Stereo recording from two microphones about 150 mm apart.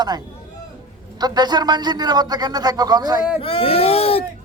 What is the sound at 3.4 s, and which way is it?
Speech, 40° left (ahead or behind).